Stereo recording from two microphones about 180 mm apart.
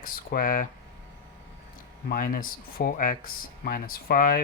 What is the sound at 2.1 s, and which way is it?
Speech, 50° left (ahead or behind).